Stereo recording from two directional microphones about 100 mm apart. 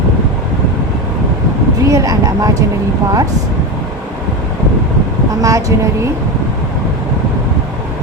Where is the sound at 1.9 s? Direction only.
35° right (ahead or behind).